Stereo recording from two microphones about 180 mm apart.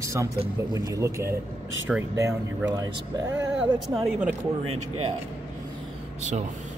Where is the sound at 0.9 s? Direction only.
15° right (ahead or behind).